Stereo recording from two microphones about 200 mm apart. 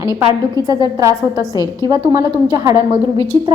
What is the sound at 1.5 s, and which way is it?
Speech, 20° left (ahead or behind).